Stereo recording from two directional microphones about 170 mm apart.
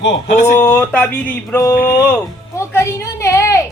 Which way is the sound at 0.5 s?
15° left (ahead or behind).